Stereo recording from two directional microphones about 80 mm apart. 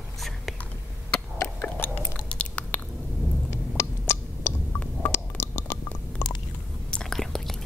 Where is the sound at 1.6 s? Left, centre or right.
Centre.